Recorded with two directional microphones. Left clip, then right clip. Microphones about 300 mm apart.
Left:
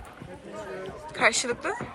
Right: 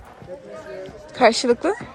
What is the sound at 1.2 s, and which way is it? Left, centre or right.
Speech, centre.